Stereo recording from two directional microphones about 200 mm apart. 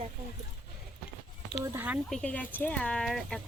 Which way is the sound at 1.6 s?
10° right (ahead or behind).